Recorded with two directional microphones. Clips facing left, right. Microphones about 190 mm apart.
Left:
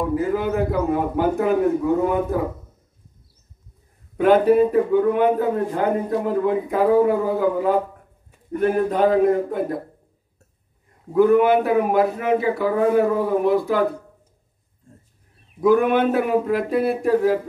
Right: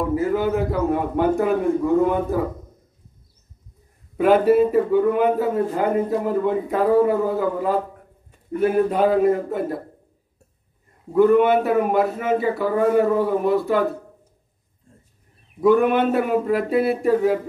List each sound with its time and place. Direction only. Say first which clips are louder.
0.1 s a man's voice: right 1 dB; centre (ahead or behind)
4.2 s a man's voice: even; 5° right (ahead or behind)
11.1 s a man's voice: even; centre (ahead or behind)
15.6 s a man's voice: even; centre (ahead or behind)